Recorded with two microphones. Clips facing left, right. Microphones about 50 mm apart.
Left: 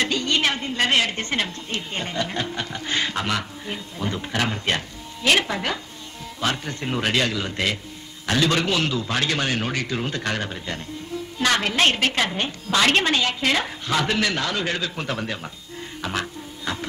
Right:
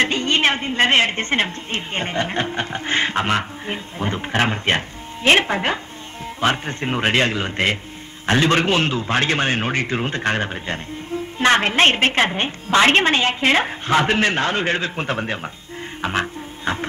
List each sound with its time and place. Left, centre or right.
0.0 s a woman's voice: right
16.0 s music: right